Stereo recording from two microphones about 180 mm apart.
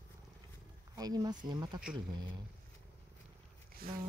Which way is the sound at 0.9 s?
20° right (ahead or behind).